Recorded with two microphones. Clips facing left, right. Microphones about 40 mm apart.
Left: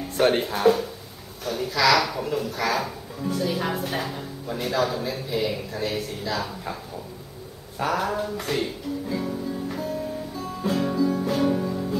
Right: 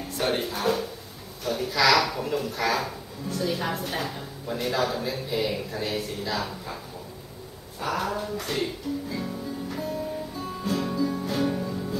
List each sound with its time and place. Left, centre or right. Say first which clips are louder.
0.2 s speech: left 6 dB; left
0.6 s speech: left 6 dB; centre
7.8 s speech: left 3 dB; centre
9.1 s music: left 4 dB; centre
10.6 s music: left 4 dB; centre